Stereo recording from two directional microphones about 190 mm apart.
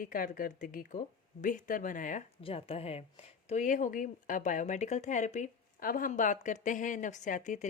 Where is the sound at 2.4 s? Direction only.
30° left (ahead or behind).